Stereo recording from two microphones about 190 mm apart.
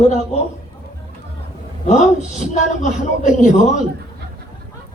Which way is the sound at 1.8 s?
40° left (ahead or behind).